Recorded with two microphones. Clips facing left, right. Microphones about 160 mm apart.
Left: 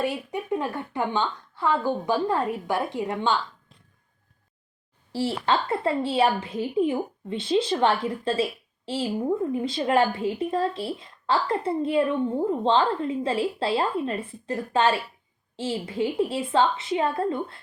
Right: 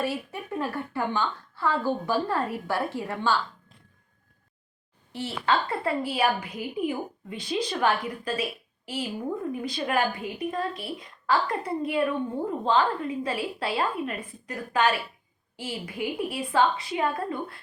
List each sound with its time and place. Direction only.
0.0 s a woman's voice: 15° left (ahead or behind)
5.5 s a woman's voice: 25° left (ahead or behind)